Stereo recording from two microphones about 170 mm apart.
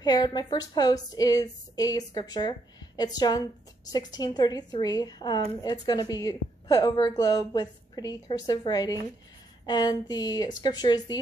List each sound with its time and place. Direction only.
0.0 s a woman's voice: 25° left (ahead or behind)